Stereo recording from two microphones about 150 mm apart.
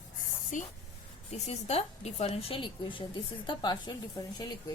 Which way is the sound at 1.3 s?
45° left (ahead or behind).